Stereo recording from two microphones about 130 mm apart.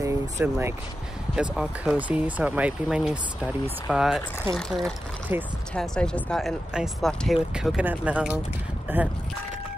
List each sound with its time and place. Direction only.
0.0 s a sound: 25° right (ahead or behind)
1.3 s speech: 5° right (ahead or behind)
5.3 s speech: 15° right (ahead or behind)
5.8 s speech: 5° left (ahead or behind); by 9.0 s 15° right (ahead or behind)